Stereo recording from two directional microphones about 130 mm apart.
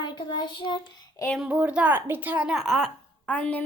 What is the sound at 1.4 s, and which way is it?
A woman's voice, 10° right (ahead or behind).